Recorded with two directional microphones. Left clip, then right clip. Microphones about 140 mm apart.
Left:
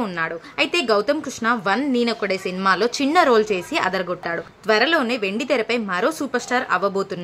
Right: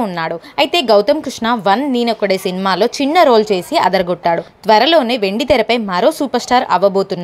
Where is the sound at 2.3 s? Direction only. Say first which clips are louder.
Right 8 dB; 30° right (ahead or behind).